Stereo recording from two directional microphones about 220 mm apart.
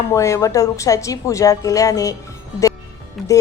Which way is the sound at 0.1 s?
15° left (ahead or behind).